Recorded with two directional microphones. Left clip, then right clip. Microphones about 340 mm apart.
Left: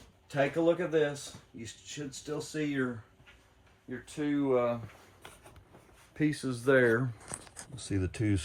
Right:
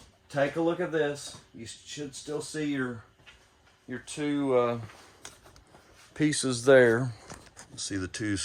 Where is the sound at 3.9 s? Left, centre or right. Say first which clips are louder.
Right 2 dB; right.